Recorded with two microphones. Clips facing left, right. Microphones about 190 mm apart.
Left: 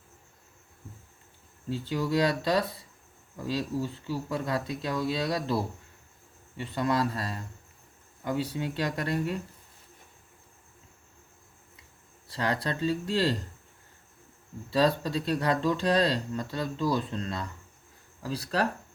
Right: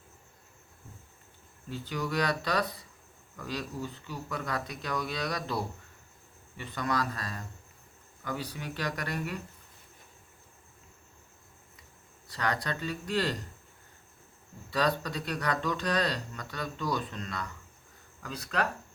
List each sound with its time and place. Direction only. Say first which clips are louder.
1.7 s speech: left 5 dB; 25° left (ahead or behind)
12.3 s speech: left 3 dB; 30° left (ahead or behind)
14.7 s speech: left 5 dB; 25° left (ahead or behind)